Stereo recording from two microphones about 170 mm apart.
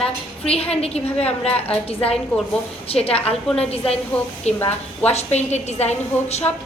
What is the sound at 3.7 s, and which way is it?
Speech, 35° left (ahead or behind).